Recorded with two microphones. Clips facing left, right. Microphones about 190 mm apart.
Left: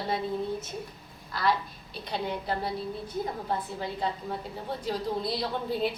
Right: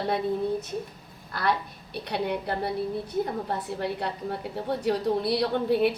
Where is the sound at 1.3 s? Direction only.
60° right (ahead or behind).